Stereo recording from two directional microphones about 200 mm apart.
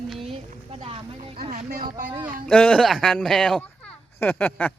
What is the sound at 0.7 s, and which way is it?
Boat, 30° right (ahead or behind).